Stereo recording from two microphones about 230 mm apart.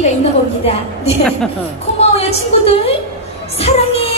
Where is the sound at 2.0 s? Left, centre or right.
Left.